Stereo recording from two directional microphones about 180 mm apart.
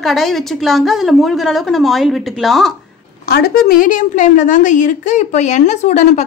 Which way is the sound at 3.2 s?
60° left (ahead or behind).